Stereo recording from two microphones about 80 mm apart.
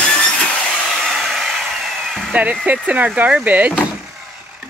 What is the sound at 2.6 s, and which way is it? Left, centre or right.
Speech, centre.